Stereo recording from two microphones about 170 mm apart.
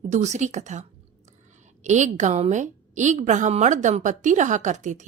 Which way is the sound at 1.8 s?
45° right (ahead or behind).